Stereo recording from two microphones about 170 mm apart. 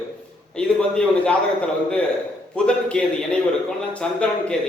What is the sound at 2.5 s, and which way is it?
A man's voice, 5° left (ahead or behind).